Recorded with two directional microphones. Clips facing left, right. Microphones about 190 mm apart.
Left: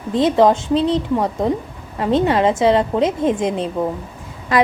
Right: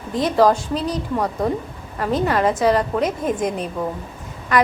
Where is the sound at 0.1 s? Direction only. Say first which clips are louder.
Left 3 dB; 25° left (ahead or behind).